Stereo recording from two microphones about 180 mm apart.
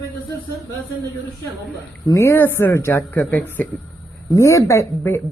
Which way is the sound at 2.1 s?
15° left (ahead or behind).